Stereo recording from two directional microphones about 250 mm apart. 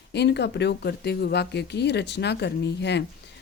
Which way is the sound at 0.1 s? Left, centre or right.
Left.